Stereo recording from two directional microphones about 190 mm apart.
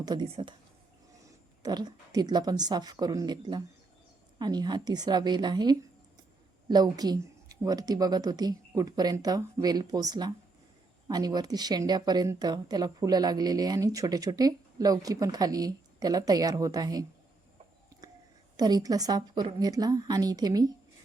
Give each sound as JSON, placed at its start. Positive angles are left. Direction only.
{"t": 0.0, "sound": "speech", "side_deg": -20}
{"t": 1.6, "sound": "speech", "side_deg": -20}
{"t": 18.5, "sound": "speech", "side_deg": -20}